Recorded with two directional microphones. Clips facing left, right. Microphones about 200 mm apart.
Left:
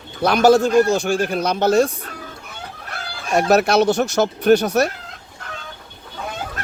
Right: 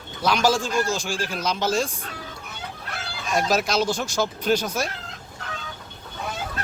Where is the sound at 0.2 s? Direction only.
60° left (ahead or behind).